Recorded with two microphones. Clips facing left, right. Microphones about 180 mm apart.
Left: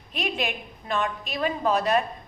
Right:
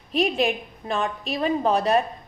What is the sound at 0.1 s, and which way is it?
A woman's voice, 35° right (ahead or behind).